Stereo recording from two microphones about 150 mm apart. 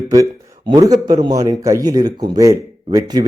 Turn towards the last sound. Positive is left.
turn(degrees=-25)  # may be behind; listen again after turning